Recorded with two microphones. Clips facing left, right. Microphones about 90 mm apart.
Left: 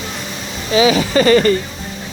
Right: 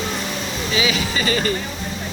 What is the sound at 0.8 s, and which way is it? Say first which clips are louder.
Speech: left 10 dB; 40° left (ahead or behind).